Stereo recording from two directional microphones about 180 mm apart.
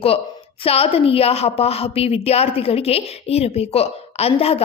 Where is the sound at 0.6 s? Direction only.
35° left (ahead or behind).